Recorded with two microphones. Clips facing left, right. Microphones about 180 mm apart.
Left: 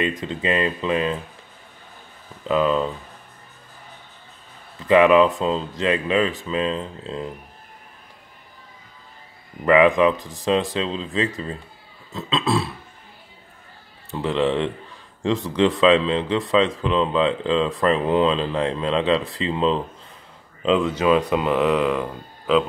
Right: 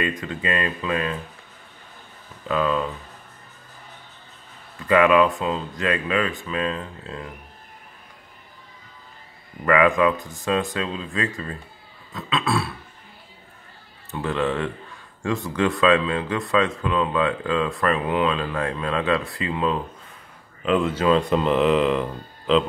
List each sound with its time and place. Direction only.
0.0 s speech: 20° left (ahead or behind)
2.4 s speech: 20° left (ahead or behind)
4.7 s speech: 20° left (ahead or behind)
9.7 s speech: 20° left (ahead or behind)
14.1 s speech: 20° left (ahead or behind)
21.3 s speech: 5° left (ahead or behind)